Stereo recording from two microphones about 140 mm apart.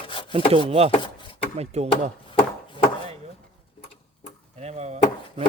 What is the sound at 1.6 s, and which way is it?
Speech, 50° right (ahead or behind).